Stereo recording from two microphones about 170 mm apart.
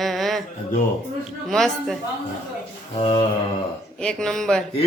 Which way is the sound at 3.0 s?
25° left (ahead or behind).